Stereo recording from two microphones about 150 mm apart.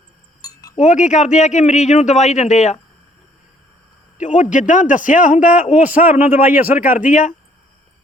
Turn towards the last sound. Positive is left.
turn(degrees=60)  # may be behind; listen again after turning